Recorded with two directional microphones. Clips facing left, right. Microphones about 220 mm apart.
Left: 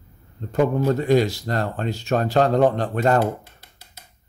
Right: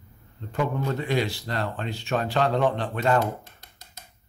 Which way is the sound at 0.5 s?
40° left (ahead or behind).